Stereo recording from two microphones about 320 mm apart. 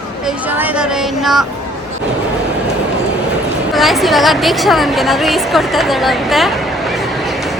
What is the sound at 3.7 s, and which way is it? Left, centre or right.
A woman's voice, centre.